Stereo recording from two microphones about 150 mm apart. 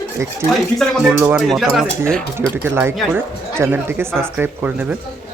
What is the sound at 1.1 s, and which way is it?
Speech, 15° right (ahead or behind).